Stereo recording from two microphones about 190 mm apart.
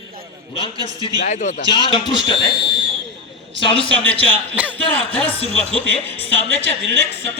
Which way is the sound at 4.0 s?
10° left (ahead or behind).